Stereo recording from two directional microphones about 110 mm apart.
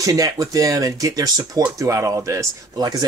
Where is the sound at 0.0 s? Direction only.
30° right (ahead or behind).